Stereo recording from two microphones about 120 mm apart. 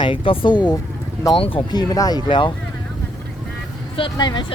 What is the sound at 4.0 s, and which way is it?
Speech, 40° left (ahead or behind).